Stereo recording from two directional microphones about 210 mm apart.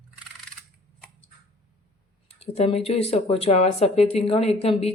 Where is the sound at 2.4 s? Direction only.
30° left (ahead or behind).